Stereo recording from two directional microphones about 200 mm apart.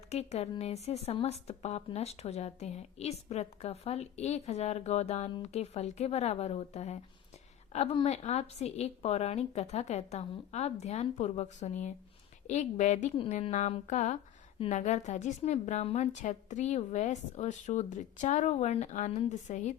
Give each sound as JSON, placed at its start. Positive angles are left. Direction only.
{"t": 0.1, "sound": "speech", "side_deg": 30}